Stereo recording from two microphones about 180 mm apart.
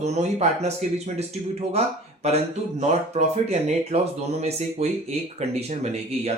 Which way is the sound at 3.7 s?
35° right (ahead or behind).